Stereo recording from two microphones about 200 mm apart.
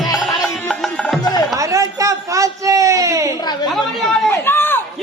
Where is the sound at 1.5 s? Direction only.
15° right (ahead or behind).